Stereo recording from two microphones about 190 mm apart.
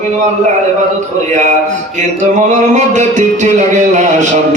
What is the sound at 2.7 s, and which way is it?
A man's voice, 40° right (ahead or behind).